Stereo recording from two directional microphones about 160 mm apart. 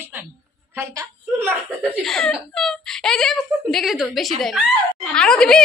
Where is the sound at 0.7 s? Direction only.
15° right (ahead or behind).